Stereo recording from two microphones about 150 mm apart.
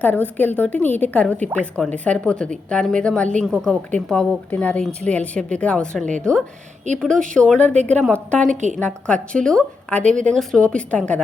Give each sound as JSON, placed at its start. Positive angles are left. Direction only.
{"t": 0.0, "sound": "a woman's voice", "side_deg": 10}
{"t": 6.9, "sound": "speech", "side_deg": -50}
{"t": 7.3, "sound": "a woman's voice", "side_deg": 5}